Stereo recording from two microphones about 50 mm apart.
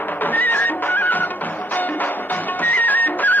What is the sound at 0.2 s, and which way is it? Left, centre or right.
Music, left.